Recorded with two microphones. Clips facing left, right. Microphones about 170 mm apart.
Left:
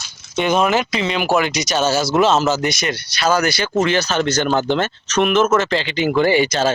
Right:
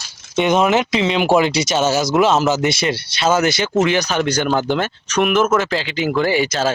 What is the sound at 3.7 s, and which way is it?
Speech, 10° right (ahead or behind).